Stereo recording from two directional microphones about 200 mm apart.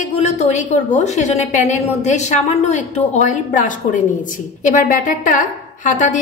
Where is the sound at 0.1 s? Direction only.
35° left (ahead or behind).